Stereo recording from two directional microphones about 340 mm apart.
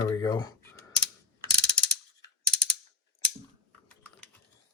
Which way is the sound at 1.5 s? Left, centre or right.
Left.